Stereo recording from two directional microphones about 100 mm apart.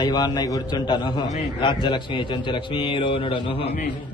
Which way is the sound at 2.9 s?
60° left (ahead or behind).